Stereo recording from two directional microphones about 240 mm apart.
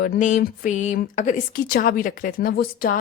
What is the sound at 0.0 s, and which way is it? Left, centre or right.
Speech, left.